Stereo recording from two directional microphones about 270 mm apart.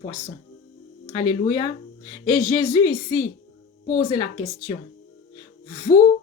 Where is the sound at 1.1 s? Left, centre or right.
Centre.